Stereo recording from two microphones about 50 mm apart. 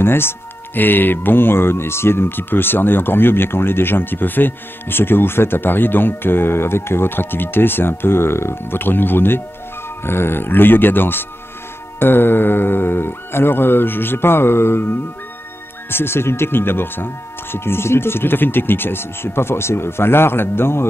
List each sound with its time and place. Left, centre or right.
0.0 s speech: left